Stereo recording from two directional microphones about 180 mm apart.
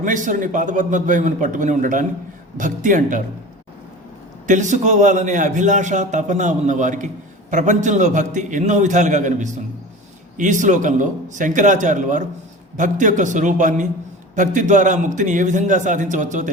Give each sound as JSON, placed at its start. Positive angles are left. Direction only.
{"t": 0.0, "sound": "a man's voice", "side_deg": -45}
{"t": 4.4, "sound": "a man's voice", "side_deg": -45}